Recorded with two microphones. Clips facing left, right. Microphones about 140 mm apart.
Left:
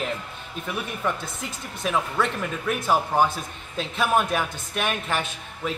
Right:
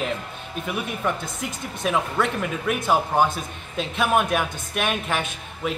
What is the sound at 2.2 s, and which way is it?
Speech, 5° right (ahead or behind).